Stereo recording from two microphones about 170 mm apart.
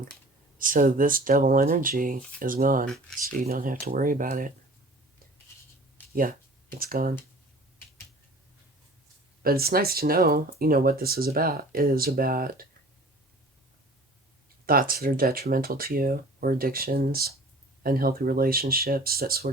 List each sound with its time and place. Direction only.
0.6 s speech: 55° right (ahead or behind)
2.8 s speech: 5° left (ahead or behind)
3.5 s speech: 60° right (ahead or behind)
6.7 s speech: 60° right (ahead or behind)
9.4 s speech: 60° right (ahead or behind)
14.7 s speech: 60° right (ahead or behind)